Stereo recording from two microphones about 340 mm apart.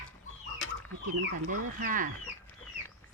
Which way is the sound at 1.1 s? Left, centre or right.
Right.